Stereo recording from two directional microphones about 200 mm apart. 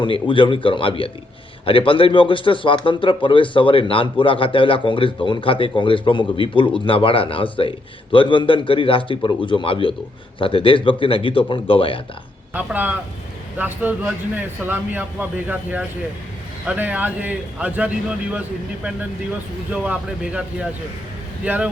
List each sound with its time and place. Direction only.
0.0 s speech: 25° left (ahead or behind)
12.5 s a man's voice: 5° right (ahead or behind)